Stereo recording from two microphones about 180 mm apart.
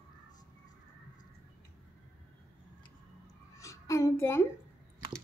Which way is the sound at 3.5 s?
15° left (ahead or behind).